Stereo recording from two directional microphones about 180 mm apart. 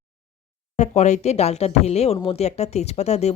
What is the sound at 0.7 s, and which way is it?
Speech, 40° left (ahead or behind).